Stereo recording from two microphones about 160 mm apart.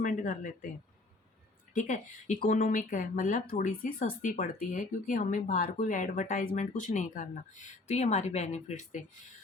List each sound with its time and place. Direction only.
0.0 s speech: 55° left (ahead or behind)
1.7 s speech: 50° left (ahead or behind)
3.6 s speech: 65° left (ahead or behind); by 9.0 s 50° left (ahead or behind)